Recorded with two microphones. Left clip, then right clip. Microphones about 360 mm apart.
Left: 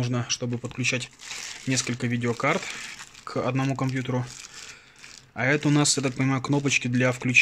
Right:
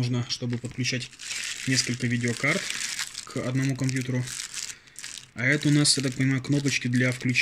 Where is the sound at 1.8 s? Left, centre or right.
Left.